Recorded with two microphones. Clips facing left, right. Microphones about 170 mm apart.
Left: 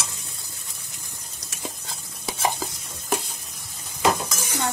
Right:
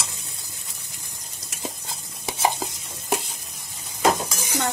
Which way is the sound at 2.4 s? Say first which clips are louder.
Right 2 dB; 20° right (ahead or behind).